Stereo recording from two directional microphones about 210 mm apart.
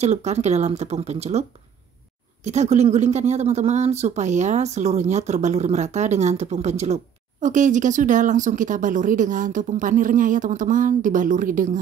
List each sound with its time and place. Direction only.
0.0 s speech: 30° right (ahead or behind)
2.4 s speech: 30° right (ahead or behind)